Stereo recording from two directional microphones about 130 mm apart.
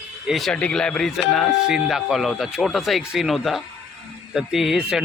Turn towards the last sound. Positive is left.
turn(degrees=-5)  # may be behind; listen again after turning